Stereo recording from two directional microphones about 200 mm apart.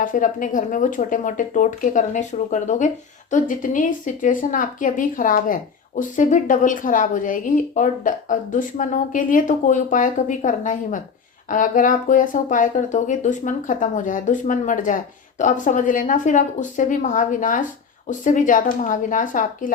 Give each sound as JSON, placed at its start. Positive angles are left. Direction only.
{"t": 0.0, "sound": "speech", "side_deg": 40}